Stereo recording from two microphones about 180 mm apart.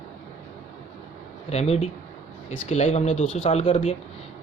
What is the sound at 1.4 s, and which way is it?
A man's voice, 35° left (ahead or behind).